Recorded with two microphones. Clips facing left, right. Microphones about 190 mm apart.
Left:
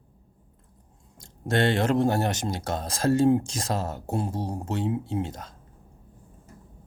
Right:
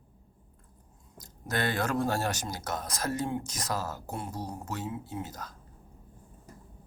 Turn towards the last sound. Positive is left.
turn(degrees=25)  # may be behind; listen again after turning